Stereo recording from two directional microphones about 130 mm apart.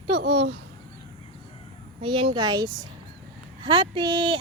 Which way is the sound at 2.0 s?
45° right (ahead or behind).